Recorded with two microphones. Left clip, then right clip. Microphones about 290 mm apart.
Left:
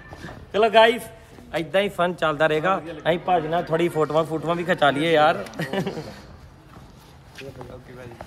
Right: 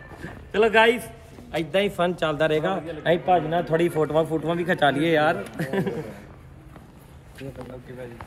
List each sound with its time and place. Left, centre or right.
0.5 s a man's voice: left
0.9 s a man's voice: centre
2.7 s a man's voice: left